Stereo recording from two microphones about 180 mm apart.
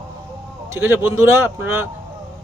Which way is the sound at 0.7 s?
15° right (ahead or behind).